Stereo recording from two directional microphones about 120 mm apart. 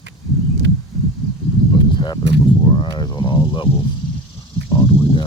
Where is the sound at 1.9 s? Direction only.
40° left (ahead or behind).